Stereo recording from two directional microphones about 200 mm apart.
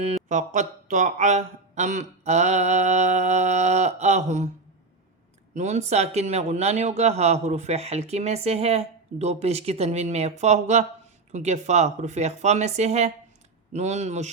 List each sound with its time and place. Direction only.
0.3 s speech: 40° right (ahead or behind)
5.5 s speech: 35° right (ahead or behind)